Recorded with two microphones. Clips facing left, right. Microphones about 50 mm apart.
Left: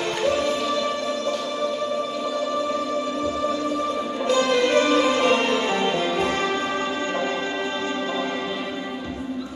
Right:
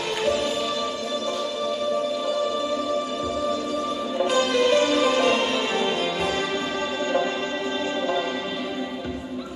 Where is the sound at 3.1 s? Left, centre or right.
Left.